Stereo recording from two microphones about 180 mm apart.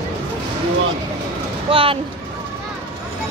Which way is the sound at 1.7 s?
30° right (ahead or behind).